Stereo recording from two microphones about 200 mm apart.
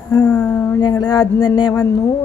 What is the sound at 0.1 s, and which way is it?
A woman's voice, 10° left (ahead or behind).